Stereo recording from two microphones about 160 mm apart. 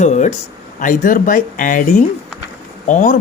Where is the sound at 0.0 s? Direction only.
45° left (ahead or behind).